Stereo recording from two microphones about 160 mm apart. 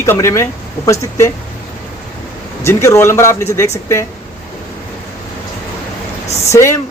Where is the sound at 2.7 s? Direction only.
15° left (ahead or behind).